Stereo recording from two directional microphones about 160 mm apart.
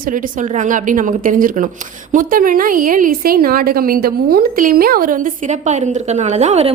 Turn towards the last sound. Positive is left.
turn(degrees=-45)  # may be behind; listen again after turning